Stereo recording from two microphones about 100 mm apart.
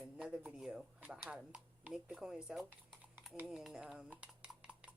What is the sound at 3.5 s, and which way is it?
Speech, 5° right (ahead or behind).